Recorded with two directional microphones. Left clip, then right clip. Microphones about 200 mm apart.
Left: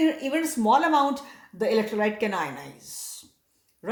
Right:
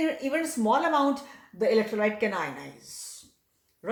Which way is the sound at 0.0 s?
40° left (ahead or behind).